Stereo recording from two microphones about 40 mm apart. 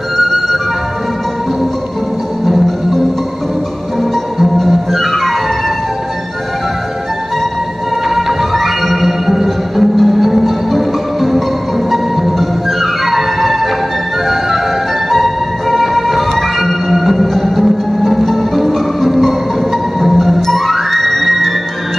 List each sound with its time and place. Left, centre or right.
2.4 s music: centre
4.6 s music: centre
8.1 s music: centre